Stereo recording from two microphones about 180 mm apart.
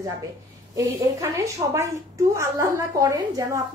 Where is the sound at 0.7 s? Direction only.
15° right (ahead or behind).